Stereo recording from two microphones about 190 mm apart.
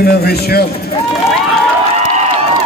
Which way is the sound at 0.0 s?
55° left (ahead or behind).